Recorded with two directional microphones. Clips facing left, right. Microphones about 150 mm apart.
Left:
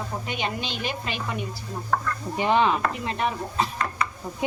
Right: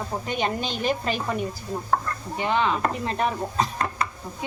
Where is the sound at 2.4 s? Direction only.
20° left (ahead or behind).